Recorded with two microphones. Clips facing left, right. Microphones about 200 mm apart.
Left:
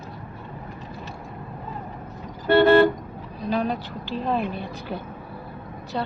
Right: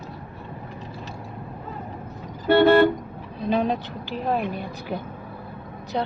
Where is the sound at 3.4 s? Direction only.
20° right (ahead or behind).